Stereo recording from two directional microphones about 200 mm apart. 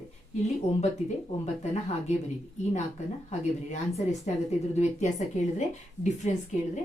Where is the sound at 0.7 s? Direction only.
30° left (ahead or behind).